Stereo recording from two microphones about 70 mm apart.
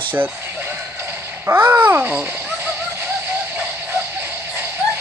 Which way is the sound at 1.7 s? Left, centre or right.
Right.